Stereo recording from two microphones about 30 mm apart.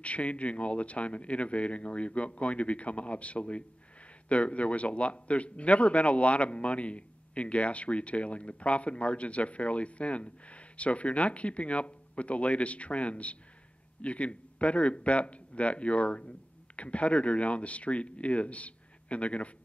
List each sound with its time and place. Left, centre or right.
0.0 s a man's voice: left